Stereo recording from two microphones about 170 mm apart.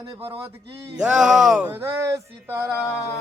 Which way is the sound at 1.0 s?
Centre (ahead or behind).